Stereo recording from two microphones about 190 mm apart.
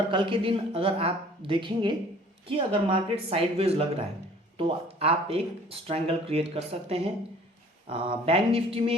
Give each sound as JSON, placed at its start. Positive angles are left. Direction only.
{"t": 0.1, "sound": "speech", "side_deg": -25}